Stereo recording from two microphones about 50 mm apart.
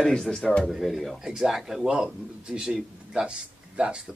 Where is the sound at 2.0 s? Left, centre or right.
Centre.